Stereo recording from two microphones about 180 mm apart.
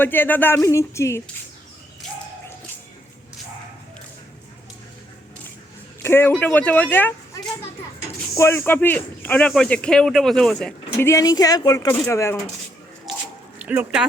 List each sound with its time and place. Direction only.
0.0 s music: 10° left (ahead or behind)
6.0 s speech: 15° left (ahead or behind)
6.3 s music: 10° left (ahead or behind)
8.4 s speech: 15° left (ahead or behind)
10.9 s speech: 15° left (ahead or behind)
13.1 s squish: centre (ahead or behind)
13.6 s speech: 10° right (ahead or behind)